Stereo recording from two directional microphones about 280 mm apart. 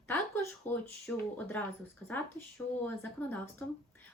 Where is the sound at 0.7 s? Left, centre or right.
Centre.